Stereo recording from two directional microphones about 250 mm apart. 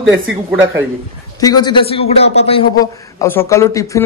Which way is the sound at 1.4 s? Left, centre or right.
Centre.